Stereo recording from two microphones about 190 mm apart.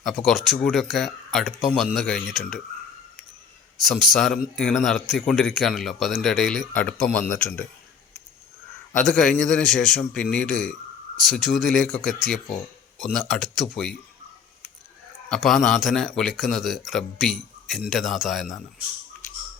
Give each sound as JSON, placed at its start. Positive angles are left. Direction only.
{"t": 0.0, "sound": "speech", "side_deg": 0}
{"t": 3.8, "sound": "speech", "side_deg": 0}
{"t": 9.0, "sound": "speech", "side_deg": 0}
{"t": 12.5, "sound": "speech", "side_deg": 40}
{"t": 13.1, "sound": "speech", "side_deg": 5}
{"t": 15.4, "sound": "speech", "side_deg": 0}